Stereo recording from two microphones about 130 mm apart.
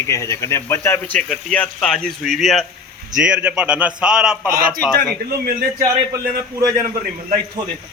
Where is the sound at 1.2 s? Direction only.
10° left (ahead or behind).